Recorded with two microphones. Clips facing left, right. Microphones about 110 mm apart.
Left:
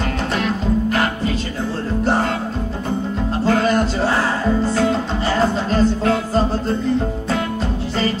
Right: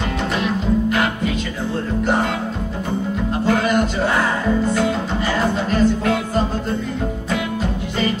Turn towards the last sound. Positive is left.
turn(degrees=30)  # may be behind; listen again after turning